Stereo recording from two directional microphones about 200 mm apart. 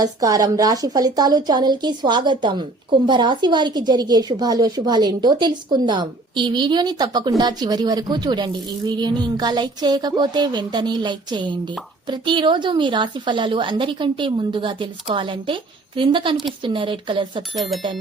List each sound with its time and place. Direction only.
0.0 s a woman's voice: 20° right (ahead or behind)